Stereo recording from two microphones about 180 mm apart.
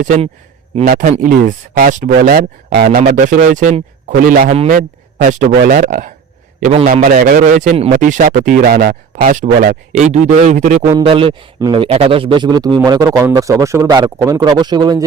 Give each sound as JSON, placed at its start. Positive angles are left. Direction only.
{"t": 0.9, "sound": "speech", "side_deg": -50}
{"t": 2.7, "sound": "speech", "side_deg": -60}
{"t": 3.1, "sound": "a man's voice", "side_deg": -50}
{"t": 6.8, "sound": "speech", "side_deg": -55}
{"t": 11.0, "sound": "speech", "side_deg": -30}